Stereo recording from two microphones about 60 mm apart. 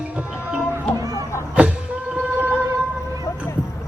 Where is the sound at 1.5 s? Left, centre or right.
Right.